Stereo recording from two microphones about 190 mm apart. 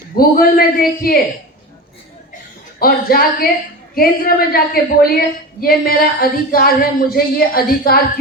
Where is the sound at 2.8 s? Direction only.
50° left (ahead or behind).